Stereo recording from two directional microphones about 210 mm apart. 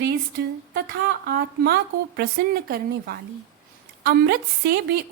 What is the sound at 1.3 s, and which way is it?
A woman's voice, 50° right (ahead or behind).